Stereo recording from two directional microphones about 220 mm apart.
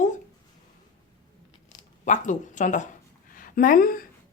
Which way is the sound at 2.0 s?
35° left (ahead or behind).